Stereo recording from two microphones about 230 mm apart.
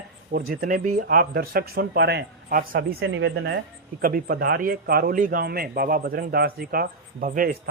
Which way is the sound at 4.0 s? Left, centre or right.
Right.